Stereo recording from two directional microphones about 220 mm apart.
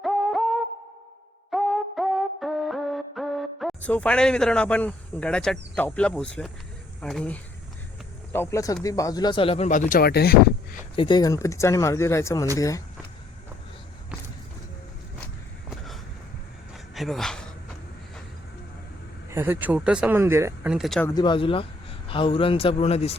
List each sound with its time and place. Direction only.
0.0 s a sound: centre (ahead or behind)
1.5 s music: centre (ahead or behind)
7.0 s speech: 5° left (ahead or behind); by 10.3 s 45° left (ahead or behind)
10.9 s speech: 20° left (ahead or behind)
16.7 s a sound: centre (ahead or behind)
19.3 s speech: 10° right (ahead or behind)
21.1 s speech: 20° left (ahead or behind)